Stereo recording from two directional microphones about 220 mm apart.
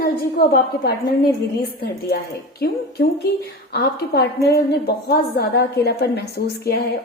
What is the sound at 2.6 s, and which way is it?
A woman's voice, 45° left (ahead or behind).